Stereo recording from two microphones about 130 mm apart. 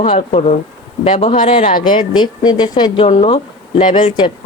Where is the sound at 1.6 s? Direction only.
90° left.